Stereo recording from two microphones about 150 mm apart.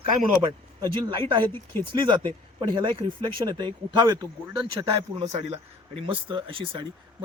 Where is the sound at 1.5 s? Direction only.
15° left (ahead or behind).